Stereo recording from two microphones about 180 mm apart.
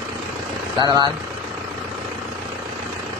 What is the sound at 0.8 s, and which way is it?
Speech, 20° right (ahead or behind).